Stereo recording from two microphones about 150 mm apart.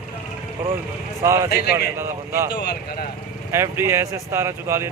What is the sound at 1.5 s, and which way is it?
Speech, 90° left.